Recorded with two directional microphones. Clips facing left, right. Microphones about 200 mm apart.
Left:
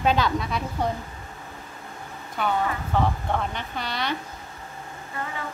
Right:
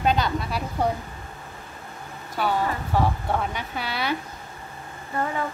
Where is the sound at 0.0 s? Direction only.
Centre (ahead or behind).